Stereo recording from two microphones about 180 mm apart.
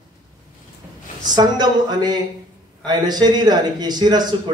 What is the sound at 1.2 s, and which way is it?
A man's voice, 25° right (ahead or behind).